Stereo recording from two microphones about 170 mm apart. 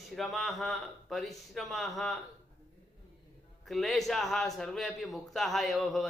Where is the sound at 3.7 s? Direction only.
Centre (ahead or behind).